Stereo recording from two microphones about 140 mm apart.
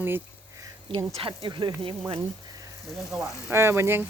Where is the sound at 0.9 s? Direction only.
40° right (ahead or behind).